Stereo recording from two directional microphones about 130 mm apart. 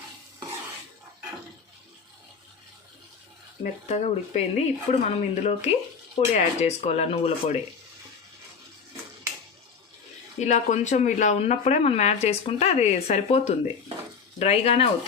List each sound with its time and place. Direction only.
3.6 s speech: 60° left (ahead or behind)
10.4 s speech: 65° left (ahead or behind)